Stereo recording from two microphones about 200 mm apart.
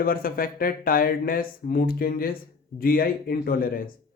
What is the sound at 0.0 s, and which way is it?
A man's voice, 45° left (ahead or behind).